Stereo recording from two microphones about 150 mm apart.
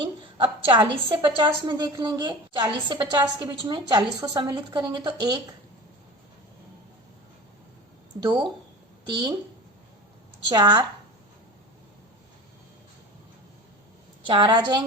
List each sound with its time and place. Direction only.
0.3 s a woman's voice: 30° right (ahead or behind)
8.2 s speech: 30° right (ahead or behind)
10.5 s a woman's voice: 25° right (ahead or behind)
14.3 s a woman's voice: 30° right (ahead or behind)